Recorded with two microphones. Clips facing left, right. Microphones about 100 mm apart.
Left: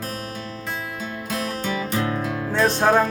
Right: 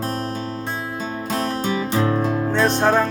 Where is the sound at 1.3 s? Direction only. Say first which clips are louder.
Right 4 dB; 30° right (ahead or behind).